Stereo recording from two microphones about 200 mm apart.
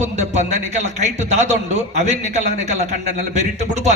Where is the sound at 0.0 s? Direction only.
35° right (ahead or behind).